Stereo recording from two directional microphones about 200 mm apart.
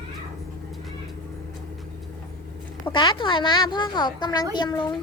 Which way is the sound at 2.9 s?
25° left (ahead or behind).